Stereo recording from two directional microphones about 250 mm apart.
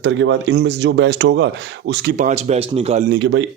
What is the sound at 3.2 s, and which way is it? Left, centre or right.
Speech, right.